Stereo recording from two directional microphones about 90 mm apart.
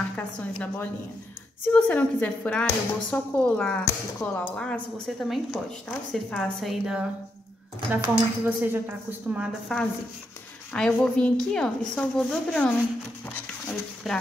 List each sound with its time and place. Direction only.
0.1 s a woman's voice: 15° left (ahead or behind)
3.8 s speech: 25° left (ahead or behind)
4.6 s a woman's voice: 10° left (ahead or behind)
7.9 s a woman's voice: 20° right (ahead or behind)
9.7 s speech: 10° left (ahead or behind)
14.0 s a woman's voice: centre (ahead or behind)